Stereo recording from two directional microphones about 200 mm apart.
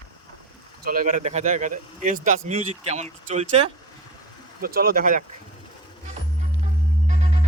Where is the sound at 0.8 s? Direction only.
45° right (ahead or behind).